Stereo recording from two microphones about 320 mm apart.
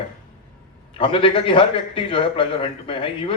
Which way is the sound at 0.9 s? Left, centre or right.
Centre.